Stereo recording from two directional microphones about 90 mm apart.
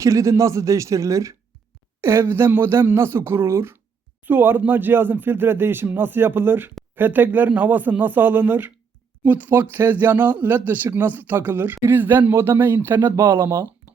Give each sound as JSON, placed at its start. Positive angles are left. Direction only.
{"t": 0.0, "sound": "speech", "side_deg": -35}